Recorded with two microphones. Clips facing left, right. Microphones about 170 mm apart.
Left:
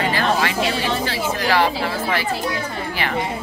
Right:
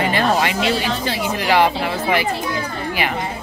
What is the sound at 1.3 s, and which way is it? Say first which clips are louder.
Speech: right 3 dB; 15° right (ahead or behind).